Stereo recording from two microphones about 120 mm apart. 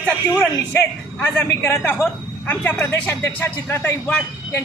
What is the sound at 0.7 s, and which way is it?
Speech, 15° left (ahead or behind).